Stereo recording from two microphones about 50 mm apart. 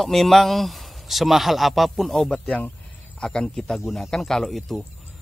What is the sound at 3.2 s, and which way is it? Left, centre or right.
Speech, centre.